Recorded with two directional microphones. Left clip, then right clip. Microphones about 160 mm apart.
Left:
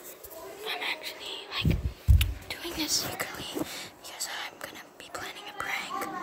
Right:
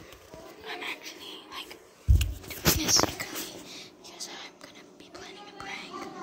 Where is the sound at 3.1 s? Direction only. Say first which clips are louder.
Left 4 dB; 15° left (ahead or behind).